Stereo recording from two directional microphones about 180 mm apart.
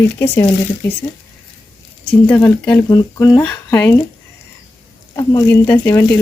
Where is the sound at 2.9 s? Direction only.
20° left (ahead or behind).